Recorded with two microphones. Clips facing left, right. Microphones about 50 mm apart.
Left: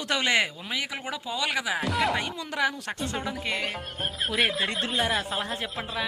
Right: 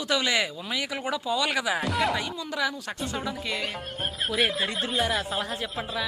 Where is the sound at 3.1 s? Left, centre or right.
Left.